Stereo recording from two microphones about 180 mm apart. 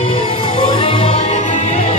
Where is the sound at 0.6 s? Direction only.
30° left (ahead or behind).